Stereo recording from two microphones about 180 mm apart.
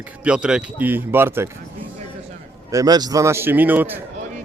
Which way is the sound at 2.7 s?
20° right (ahead or behind).